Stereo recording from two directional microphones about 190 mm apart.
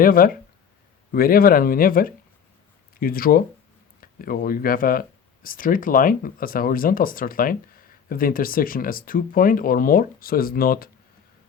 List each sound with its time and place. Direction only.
0.0 s speech: 50° left (ahead or behind)